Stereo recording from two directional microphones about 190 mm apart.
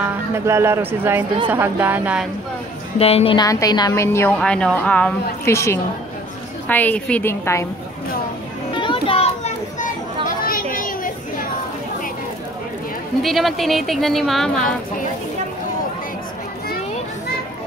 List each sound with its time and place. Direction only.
0.0 s a woman's voice: 15° right (ahead or behind)
3.0 s a woman's voice: 30° left (ahead or behind)
3.4 s a woman's voice: 20° left (ahead or behind)
8.8 s children playing: 25° left (ahead or behind)
10.2 s children playing: 50° left (ahead or behind)
13.2 s speech: centre (ahead or behind)